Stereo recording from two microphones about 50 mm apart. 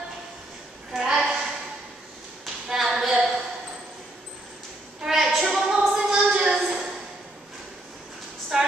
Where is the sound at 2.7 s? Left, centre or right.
Centre.